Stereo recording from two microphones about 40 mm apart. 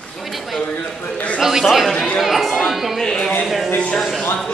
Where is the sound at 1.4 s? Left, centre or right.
Centre.